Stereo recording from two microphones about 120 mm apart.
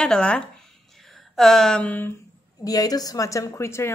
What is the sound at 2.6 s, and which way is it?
A woman's voice, 30° left (ahead or behind).